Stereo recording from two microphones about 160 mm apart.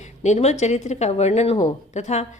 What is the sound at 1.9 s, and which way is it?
Speech, 45° left (ahead or behind).